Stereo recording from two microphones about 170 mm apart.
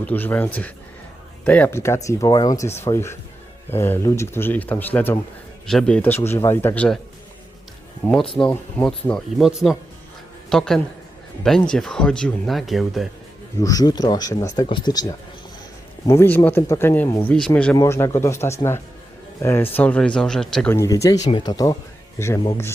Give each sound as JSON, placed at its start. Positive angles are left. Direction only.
{"t": 0.0, "sound": "speech", "side_deg": 10}
{"t": 8.0, "sound": "speech", "side_deg": 5}
{"t": 13.6, "sound": "speech", "side_deg": 20}
{"t": 20.7, "sound": "speech", "side_deg": 20}